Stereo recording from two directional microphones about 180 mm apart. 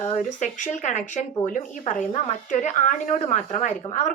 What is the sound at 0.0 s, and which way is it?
Speech, 40° left (ahead or behind).